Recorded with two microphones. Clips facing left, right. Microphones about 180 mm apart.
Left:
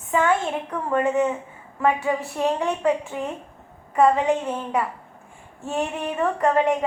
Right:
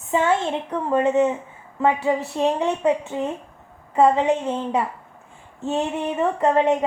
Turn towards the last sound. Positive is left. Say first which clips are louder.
# right 2 dB
turn(degrees=-25)  # may be behind; listen again after turning